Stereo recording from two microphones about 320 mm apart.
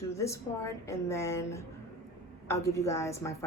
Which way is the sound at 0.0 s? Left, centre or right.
Centre.